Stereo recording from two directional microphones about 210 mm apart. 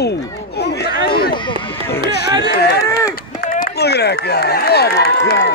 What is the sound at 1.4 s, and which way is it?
Speech, 25° left (ahead or behind).